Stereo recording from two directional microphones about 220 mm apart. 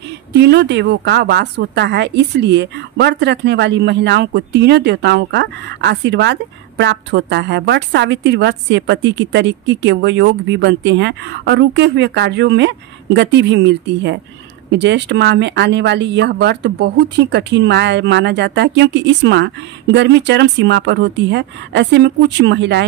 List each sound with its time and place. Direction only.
0.3 s a woman's voice: 50° right (ahead or behind)